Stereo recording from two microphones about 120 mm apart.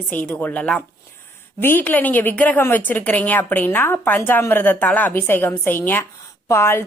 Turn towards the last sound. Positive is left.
turn(degrees=20)  # may be behind; listen again after turning